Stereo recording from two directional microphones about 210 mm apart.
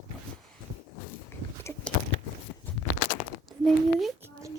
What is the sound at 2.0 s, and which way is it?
Biting, 40° left (ahead or behind).